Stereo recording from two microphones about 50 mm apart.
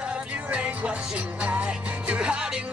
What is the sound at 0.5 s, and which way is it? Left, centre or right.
Music, right.